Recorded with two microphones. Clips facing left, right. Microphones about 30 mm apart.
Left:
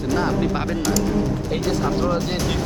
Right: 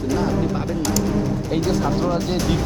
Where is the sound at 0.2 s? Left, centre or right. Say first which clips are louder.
Even; left.